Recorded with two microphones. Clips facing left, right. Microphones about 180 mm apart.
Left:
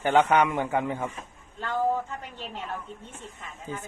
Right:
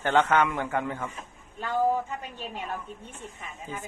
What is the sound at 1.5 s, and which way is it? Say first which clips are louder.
A woman's voice: right 1 dB; 10° right (ahead or behind).